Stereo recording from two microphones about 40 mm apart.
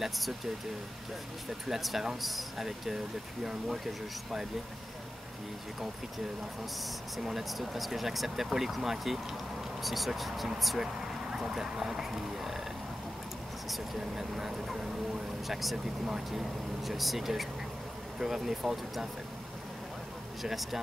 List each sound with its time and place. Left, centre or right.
1.7 s speech: centre
7.2 s speech: centre
11.4 s speech: centre
13.9 s speech: centre
20.4 s speech: centre